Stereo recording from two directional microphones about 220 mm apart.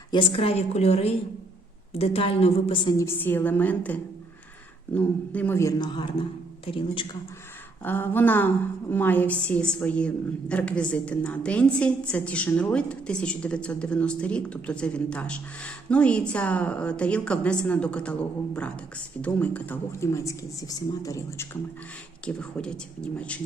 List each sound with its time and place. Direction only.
0.1 s a woman's voice: 25° left (ahead or behind)
3.0 s a woman's voice: 10° left (ahead or behind)
7.9 s a woman's voice: 10° left (ahead or behind)